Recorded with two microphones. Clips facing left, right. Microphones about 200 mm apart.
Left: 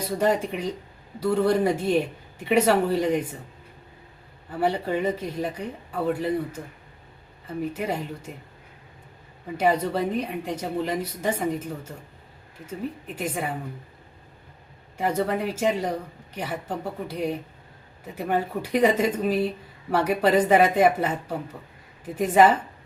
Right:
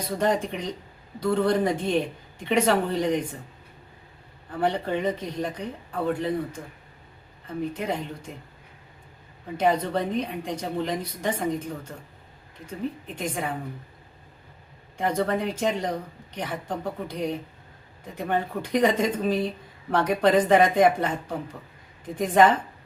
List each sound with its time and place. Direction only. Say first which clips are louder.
0.1 s a woman's voice: left 1 dB; 5° left (ahead or behind)
4.5 s a woman's voice: left 1 dB; 5° left (ahead or behind)
9.6 s a woman's voice: left 1 dB; 5° left (ahead or behind)
14.9 s a woman's voice: even; 5° left (ahead or behind)